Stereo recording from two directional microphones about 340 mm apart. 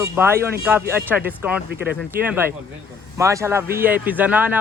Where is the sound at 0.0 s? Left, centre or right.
Centre.